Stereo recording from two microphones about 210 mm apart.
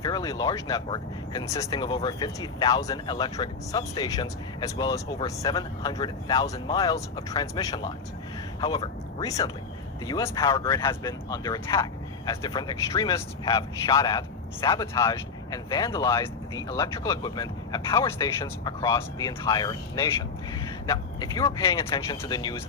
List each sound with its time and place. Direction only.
0.0 s speech: 20° left (ahead or behind)